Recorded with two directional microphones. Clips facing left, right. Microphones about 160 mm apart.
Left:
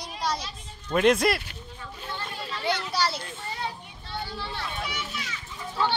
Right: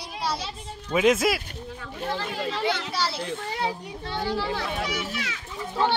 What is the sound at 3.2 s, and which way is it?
Children playing, 90° right.